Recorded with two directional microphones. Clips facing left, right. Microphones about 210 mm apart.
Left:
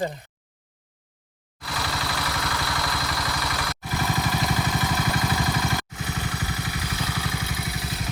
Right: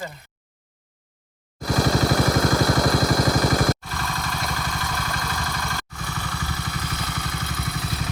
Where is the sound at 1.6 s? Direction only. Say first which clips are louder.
Right 11 dB; 45° right (ahead or behind).